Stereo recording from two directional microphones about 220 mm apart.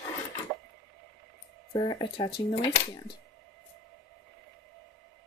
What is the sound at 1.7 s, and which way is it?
Speech, 20° left (ahead or behind).